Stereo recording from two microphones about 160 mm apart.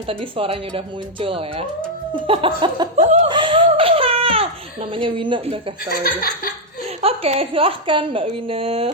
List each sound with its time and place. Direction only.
0.1 s a woman's voice: 35° right (ahead or behind)
2.2 s a sound: 35° right (ahead or behind)
3.2 s baby cry: 30° right (ahead or behind)
5.9 s speech: 70° left (ahead or behind)
7.0 s a woman's voice: 40° right (ahead or behind)